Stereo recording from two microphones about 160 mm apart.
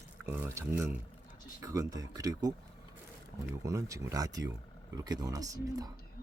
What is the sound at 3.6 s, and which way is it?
Speech, 20° right (ahead or behind).